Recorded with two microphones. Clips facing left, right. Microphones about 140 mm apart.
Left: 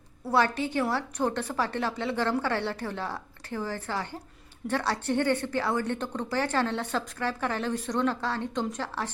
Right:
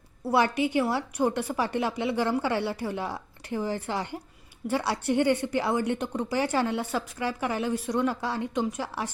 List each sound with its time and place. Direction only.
0.3 s speech: 15° right (ahead or behind)